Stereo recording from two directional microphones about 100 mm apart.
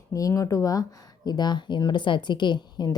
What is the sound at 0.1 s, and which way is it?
A woman's voice, 35° left (ahead or behind).